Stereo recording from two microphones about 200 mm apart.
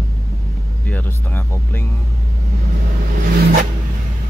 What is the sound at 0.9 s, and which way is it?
Speech, 10° left (ahead or behind).